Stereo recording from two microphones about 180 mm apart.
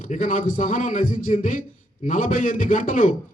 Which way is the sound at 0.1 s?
45° left (ahead or behind).